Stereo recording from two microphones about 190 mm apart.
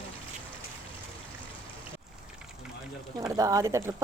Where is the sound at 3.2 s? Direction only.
15° right (ahead or behind).